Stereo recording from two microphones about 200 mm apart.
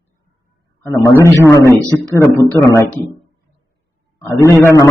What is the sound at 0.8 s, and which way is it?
Speech, 15° left (ahead or behind).